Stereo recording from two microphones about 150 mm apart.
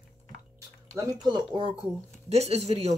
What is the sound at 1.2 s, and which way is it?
Speech, 30° right (ahead or behind).